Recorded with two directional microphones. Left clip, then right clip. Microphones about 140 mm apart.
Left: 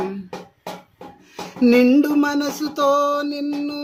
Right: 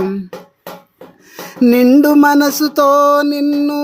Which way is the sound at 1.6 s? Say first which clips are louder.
Right 5 dB; 45° right (ahead or behind).